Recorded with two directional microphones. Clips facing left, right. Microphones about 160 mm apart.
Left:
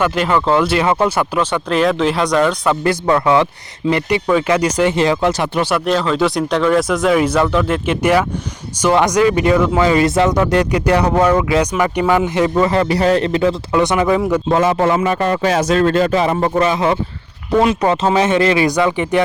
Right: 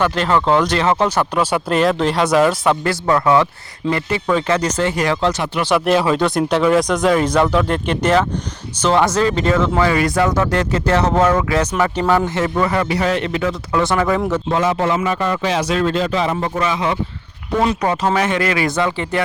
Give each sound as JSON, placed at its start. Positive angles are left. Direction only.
{"t": 0.0, "sound": "speech", "side_deg": 10}
{"t": 1.4, "sound": "speech", "side_deg": -10}
{"t": 2.8, "sound": "a man's voice", "side_deg": 20}
{"t": 5.6, "sound": "a man's voice", "side_deg": -5}
{"t": 13.7, "sound": "speech", "side_deg": 15}
{"t": 14.5, "sound": "a man's voice", "side_deg": 50}
{"t": 16.6, "sound": "speech", "side_deg": 40}
{"t": 17.8, "sound": "a man's voice", "side_deg": 20}